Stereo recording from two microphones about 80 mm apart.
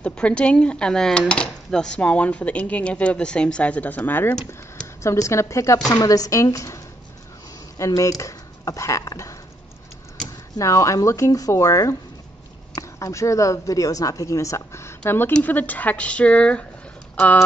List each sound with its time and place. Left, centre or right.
0.0 s speech: centre
5.0 s a woman's voice: left
10.6 s speech: left; by 16.6 s centre